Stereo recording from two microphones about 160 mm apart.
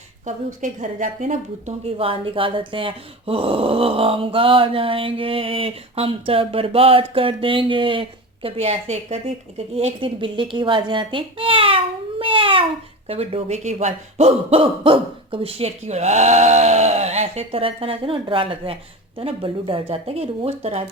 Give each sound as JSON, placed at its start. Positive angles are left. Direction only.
{"t": 0.3, "sound": "speech", "side_deg": -50}
{"t": 12.2, "sound": "babbling", "side_deg": -35}
{"t": 13.1, "sound": "speech", "side_deg": -40}